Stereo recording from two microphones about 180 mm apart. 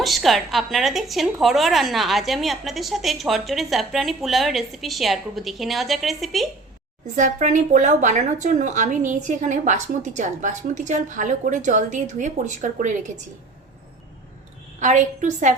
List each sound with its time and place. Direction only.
0.0 s a woman's voice: centre (ahead or behind)
7.2 s a woman's voice: 40° right (ahead or behind)
14.8 s a woman's voice: 45° right (ahead or behind)